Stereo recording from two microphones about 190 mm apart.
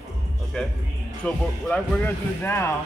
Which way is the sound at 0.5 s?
5° left (ahead or behind).